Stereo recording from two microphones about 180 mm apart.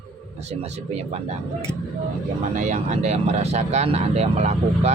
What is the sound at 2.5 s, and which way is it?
Speech, 45° right (ahead or behind).